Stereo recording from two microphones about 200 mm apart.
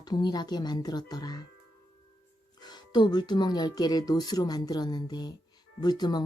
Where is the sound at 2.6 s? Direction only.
20° left (ahead or behind).